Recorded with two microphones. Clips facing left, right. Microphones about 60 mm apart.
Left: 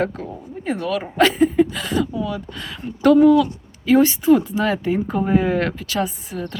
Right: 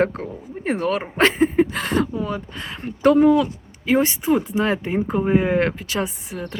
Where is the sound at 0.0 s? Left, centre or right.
Right.